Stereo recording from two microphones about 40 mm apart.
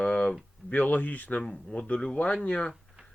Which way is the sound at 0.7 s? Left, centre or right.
Left.